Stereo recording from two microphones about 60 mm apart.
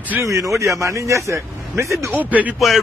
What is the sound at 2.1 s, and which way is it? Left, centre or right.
Speech, right.